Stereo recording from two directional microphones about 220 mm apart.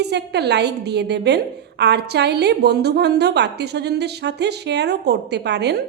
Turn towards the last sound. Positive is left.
turn(degrees=-50)  # may be behind; listen again after turning